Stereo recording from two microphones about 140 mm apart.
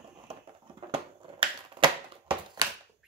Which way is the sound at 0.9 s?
40° right (ahead or behind).